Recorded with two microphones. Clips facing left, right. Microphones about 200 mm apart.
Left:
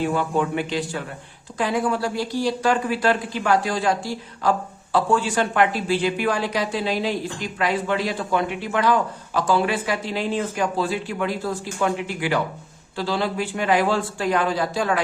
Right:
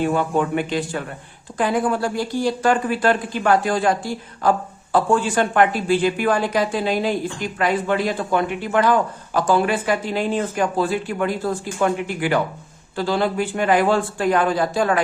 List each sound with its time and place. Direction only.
0.0 s speech: 45° right (ahead or behind)